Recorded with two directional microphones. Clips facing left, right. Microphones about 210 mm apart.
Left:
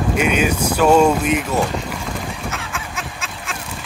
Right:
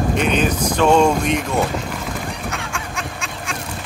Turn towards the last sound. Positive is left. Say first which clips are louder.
# right 2 dB
turn(degrees=0)  # may be behind; listen again after turning